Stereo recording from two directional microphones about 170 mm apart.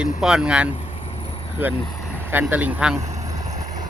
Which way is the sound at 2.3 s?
10° right (ahead or behind).